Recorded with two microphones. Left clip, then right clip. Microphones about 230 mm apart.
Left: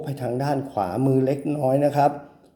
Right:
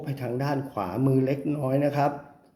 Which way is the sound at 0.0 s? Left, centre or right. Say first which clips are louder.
Left 4 dB; centre.